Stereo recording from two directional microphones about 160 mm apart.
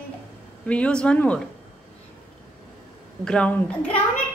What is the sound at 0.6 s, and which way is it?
Speech, 5° left (ahead or behind).